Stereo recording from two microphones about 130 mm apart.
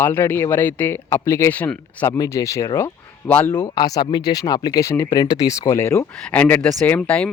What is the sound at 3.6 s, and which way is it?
Speech, 30° left (ahead or behind).